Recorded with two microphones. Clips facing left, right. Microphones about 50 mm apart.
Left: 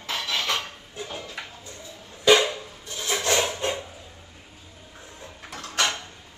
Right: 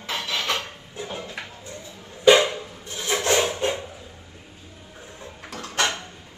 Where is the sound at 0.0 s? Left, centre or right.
Right.